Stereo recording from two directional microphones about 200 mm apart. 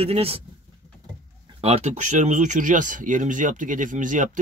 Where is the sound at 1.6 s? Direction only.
30° right (ahead or behind).